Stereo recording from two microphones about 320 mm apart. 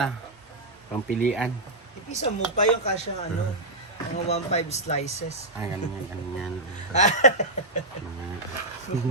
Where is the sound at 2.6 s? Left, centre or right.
Left.